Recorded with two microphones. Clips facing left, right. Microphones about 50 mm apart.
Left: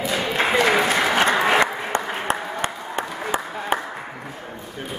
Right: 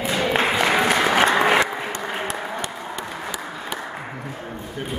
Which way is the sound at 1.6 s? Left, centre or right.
Left.